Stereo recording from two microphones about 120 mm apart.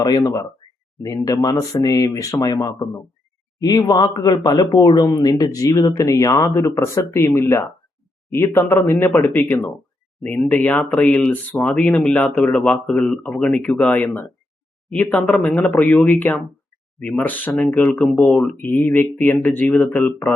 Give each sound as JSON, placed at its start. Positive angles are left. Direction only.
{"t": 1.0, "sound": "speech", "side_deg": 30}
{"t": 17.0, "sound": "speech", "side_deg": 10}